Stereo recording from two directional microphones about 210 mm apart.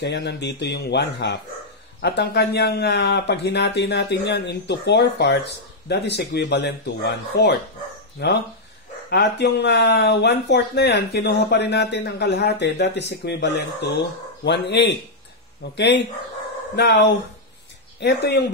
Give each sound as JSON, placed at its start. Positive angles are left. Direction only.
{"t": 0.0, "sound": "speech", "side_deg": 55}
{"t": 18.0, "sound": "speech", "side_deg": 55}